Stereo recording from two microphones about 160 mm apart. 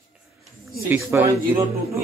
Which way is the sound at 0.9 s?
15° right (ahead or behind).